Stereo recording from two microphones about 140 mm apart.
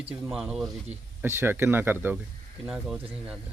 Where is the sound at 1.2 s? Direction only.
15° right (ahead or behind).